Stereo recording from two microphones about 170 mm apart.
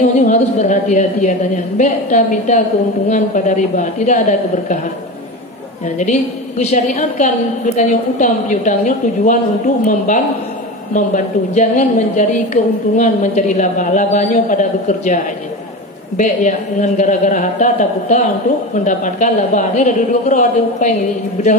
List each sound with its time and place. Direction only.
0.1 s a woman's voice: 45° left (ahead or behind)
6.6 s a woman's voice: 45° left (ahead or behind)
16.2 s a woman's voice: 45° left (ahead or behind)